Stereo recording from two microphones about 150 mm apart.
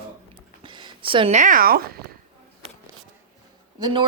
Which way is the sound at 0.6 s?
30° right (ahead or behind).